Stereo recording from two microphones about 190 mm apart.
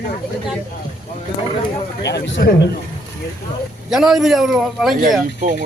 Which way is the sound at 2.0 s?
70° left (ahead or behind).